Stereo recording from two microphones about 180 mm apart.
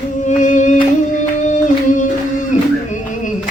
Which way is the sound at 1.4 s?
45° left (ahead or behind).